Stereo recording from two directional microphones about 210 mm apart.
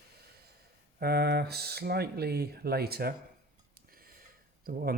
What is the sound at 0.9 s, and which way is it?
Speech, 50° right (ahead or behind).